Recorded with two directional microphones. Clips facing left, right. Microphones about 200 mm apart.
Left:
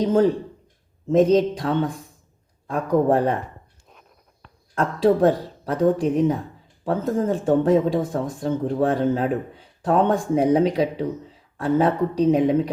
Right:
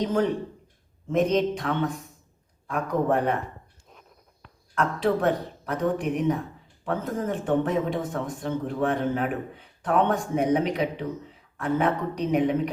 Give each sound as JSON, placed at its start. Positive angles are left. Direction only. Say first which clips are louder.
{"t": 0.0, "sound": "speech", "louder": "left 6 dB", "side_deg": 30}
{"t": 4.7, "sound": "speech", "louder": "left 5 dB", "side_deg": 30}